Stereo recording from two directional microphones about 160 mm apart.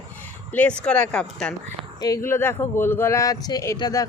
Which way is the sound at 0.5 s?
10° left (ahead or behind).